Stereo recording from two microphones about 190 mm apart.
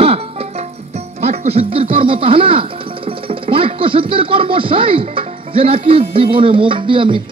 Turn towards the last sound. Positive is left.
turn(degrees=-25)  # may be behind; listen again after turning